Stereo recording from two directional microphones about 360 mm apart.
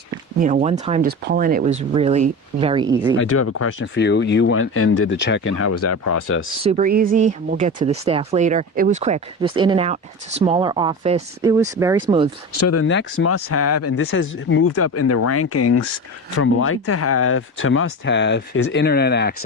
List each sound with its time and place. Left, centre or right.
0.3 s speech: right
3.2 s speech: left
6.6 s speech: centre
12.5 s speech: left